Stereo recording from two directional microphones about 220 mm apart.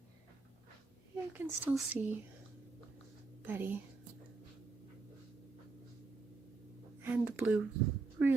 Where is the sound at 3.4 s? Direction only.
10° right (ahead or behind).